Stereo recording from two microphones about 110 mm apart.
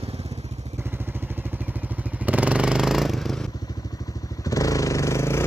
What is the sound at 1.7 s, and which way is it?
Motorcycle, 15° right (ahead or behind).